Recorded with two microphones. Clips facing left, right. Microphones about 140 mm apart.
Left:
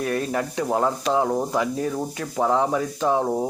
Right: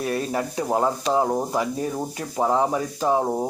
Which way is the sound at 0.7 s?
5° right (ahead or behind).